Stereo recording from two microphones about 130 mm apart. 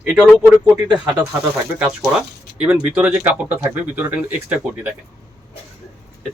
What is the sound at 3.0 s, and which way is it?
Speech, 10° right (ahead or behind).